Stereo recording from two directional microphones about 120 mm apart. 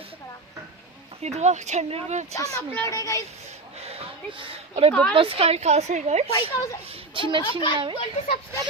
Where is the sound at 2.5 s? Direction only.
20° left (ahead or behind).